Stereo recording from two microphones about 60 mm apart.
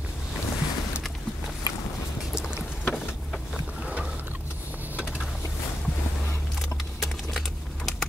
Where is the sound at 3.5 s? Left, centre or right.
Centre.